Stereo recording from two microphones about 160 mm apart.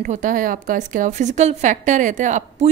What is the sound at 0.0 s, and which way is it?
A woman's voice, 55° right (ahead or behind).